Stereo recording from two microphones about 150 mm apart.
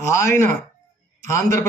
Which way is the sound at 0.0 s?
20° left (ahead or behind).